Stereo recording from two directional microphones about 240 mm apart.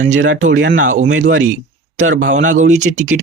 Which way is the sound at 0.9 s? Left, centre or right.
Right.